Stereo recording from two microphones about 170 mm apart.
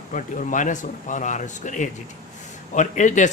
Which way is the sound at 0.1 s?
50° left (ahead or behind).